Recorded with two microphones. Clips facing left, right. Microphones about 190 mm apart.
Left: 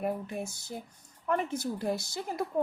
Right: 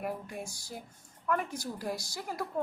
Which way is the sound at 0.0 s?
25° left (ahead or behind).